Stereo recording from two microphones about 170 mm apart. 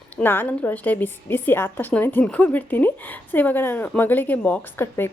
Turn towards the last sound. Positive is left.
turn(degrees=15)  # may be behind; listen again after turning